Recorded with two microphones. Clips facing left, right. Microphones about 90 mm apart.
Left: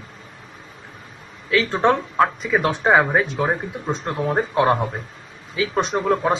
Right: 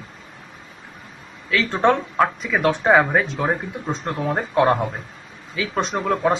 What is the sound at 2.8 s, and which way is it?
Speech, 10° left (ahead or behind).